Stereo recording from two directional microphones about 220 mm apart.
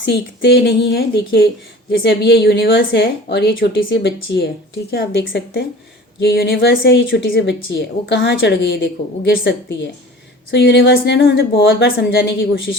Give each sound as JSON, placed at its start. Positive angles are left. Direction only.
{"t": 0.0, "sound": "a woman's voice", "side_deg": 50}
{"t": 11.6, "sound": "a woman's voice", "side_deg": 60}
{"t": 11.9, "sound": "a woman's voice", "side_deg": 45}